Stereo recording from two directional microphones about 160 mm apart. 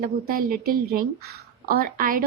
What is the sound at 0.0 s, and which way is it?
A woman's voice, 65° right (ahead or behind).